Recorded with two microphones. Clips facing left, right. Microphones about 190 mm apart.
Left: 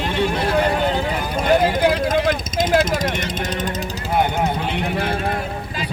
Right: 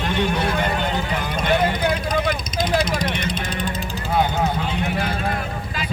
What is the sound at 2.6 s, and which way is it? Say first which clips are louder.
Vehicle: left 3 dB; 50° left (ahead or behind).